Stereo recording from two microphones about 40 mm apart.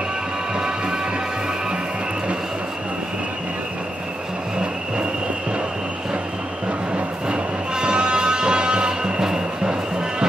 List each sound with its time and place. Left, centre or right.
7.2 s music: right